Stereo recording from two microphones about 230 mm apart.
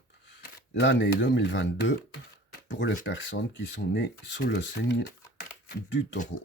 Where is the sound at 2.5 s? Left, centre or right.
Left.